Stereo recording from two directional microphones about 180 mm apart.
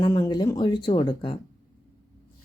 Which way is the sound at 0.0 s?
25° left (ahead or behind).